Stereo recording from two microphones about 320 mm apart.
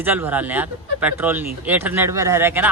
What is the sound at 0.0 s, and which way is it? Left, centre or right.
A man's voice, centre.